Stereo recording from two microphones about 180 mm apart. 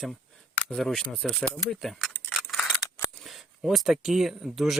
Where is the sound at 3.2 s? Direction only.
Centre (ahead or behind).